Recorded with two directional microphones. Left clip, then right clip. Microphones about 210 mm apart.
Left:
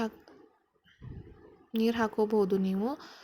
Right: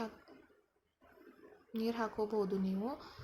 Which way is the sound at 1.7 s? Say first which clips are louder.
Left 9 dB; 35° left (ahead or behind).